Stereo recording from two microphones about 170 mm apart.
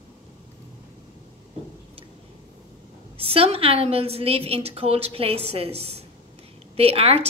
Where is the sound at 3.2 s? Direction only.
35° right (ahead or behind).